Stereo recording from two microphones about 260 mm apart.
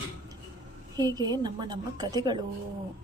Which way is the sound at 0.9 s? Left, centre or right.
Centre.